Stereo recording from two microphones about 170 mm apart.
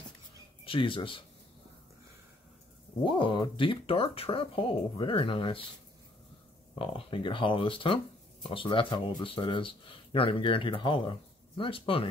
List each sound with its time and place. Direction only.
0.7 s speech: 30° left (ahead or behind)
3.0 s speech: 30° left (ahead or behind)
6.7 s speech: 30° left (ahead or behind)